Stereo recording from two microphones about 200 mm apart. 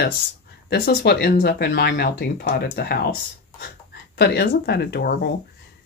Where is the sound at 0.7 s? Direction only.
50° left (ahead or behind).